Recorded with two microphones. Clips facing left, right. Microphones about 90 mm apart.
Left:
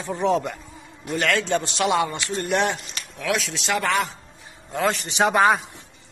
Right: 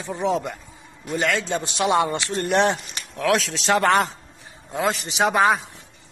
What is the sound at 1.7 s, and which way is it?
Speech, 25° right (ahead or behind).